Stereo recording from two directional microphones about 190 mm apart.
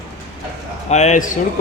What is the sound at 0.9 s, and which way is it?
Speech, 35° left (ahead or behind).